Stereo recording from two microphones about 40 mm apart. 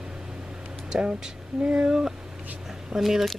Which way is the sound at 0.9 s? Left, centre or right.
Right.